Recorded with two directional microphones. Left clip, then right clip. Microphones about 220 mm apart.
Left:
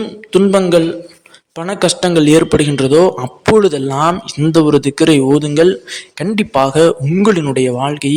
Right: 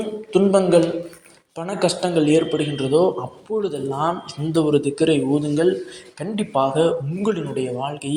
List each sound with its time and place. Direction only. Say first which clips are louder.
0.3 s a man's voice: left 5 dB; 35° left (ahead or behind)